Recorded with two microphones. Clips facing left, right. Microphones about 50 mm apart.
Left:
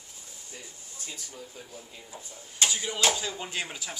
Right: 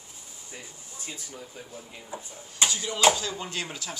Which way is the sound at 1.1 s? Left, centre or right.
Right.